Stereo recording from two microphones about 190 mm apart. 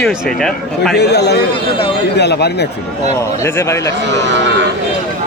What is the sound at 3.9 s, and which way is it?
Speech, 65° right (ahead or behind).